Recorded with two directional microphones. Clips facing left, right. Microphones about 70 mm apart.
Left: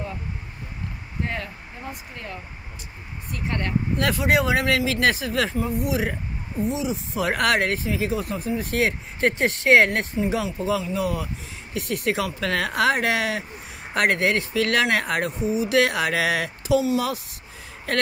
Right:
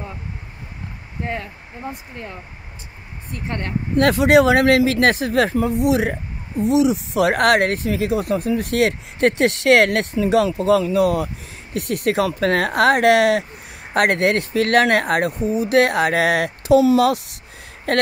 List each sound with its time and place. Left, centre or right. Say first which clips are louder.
1.2 s speech: right 3 dB; right
3.9 s speech: right 10 dB; right
4.2 s speech: right 8 dB; right
5.8 s speech: right 8 dB; right
6.6 s speech: right 9 dB; right
7.3 s speech: right 5 dB; right
16.9 s speech: right 8 dB; right
17.9 s speech: right 5 dB; right